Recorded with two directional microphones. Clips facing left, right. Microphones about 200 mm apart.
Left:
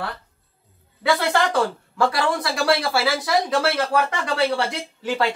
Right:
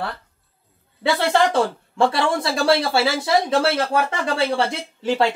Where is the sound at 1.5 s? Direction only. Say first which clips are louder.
Right 2 dB; 25° right (ahead or behind).